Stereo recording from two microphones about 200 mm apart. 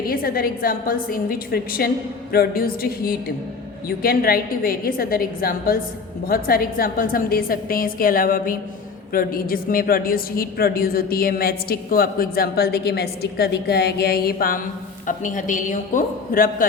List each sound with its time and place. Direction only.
0.1 s a woman's voice: 45° left (ahead or behind)